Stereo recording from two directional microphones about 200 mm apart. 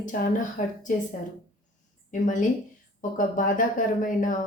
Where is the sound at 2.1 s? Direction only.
40° left (ahead or behind).